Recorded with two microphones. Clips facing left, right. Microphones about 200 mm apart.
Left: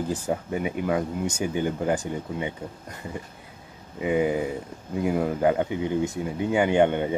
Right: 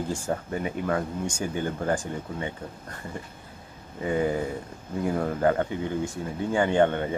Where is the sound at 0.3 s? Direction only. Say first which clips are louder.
Left 2 dB; 10° left (ahead or behind).